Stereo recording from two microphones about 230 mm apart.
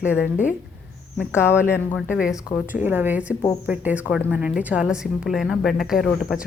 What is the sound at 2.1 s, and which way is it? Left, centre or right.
A woman's voice, centre.